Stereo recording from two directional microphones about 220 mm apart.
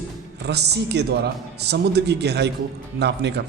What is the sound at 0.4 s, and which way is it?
Speech, 50° right (ahead or behind).